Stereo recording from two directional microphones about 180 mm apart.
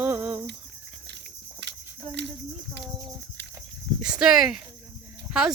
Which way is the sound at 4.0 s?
5° right (ahead or behind).